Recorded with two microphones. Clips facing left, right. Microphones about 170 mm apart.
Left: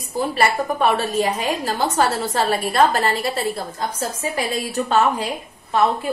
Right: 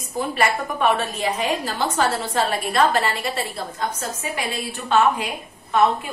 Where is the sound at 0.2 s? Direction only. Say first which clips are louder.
Left 2 dB; 35° left (ahead or behind).